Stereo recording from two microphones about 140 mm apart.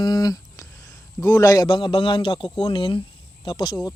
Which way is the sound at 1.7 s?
35° left (ahead or behind).